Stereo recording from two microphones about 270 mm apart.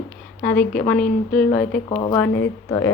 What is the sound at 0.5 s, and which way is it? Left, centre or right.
Speech, left.